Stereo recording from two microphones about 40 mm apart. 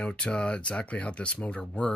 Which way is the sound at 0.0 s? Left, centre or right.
Left.